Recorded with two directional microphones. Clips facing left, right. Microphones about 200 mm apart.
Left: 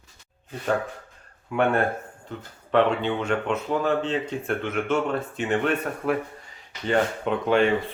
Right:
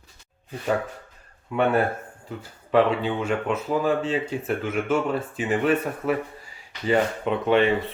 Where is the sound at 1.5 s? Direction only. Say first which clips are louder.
Right 1 dB; 5° right (ahead or behind).